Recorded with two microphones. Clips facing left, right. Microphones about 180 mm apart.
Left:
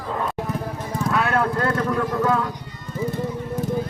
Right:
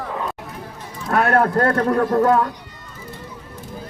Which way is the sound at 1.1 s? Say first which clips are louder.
Right 5 dB; 50° right (ahead or behind).